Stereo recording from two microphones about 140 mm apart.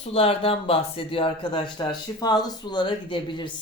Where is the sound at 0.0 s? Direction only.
45° left (ahead or behind).